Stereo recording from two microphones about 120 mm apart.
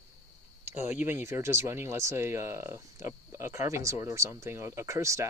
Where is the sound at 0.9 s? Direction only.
20° right (ahead or behind).